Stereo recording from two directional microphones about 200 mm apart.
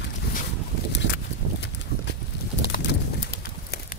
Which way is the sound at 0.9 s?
60° left (ahead or behind).